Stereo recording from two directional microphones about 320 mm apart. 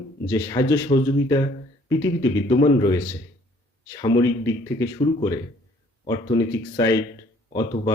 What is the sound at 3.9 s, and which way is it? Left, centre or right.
Speech, centre.